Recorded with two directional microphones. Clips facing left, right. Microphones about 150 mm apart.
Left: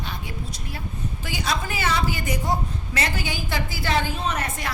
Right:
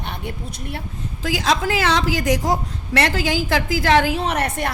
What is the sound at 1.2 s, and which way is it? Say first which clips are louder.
A woman's voice: right 8 dB; 90° right.